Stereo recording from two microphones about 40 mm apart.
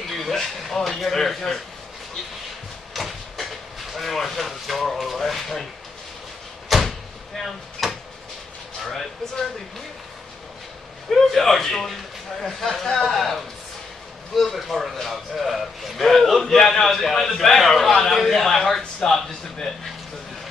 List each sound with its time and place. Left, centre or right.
0.0 s speech: centre
2.9 s train: centre
3.9 s a sound: centre
6.7 s door: centre
7.3 s a sound: centre
11.1 s a man's voice: centre
17.6 s a man's voice: centre
18.8 s a man's voice: centre